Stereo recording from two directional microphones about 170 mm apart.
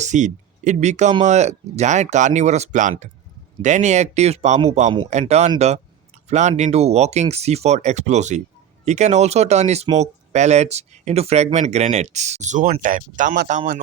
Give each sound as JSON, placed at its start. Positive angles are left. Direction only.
{"t": 0.0, "sound": "speech", "side_deg": -45}